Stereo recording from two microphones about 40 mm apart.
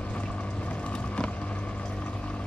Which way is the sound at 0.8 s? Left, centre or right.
Left.